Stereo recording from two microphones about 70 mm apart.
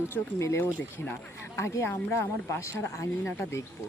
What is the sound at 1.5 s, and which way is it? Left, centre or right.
Speech, left.